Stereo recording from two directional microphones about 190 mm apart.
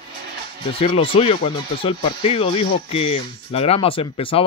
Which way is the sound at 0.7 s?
30° left (ahead or behind).